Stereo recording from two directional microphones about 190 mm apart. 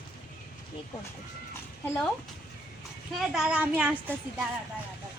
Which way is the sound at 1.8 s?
10° left (ahead or behind).